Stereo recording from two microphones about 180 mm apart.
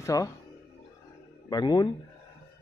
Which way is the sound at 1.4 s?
20° left (ahead or behind).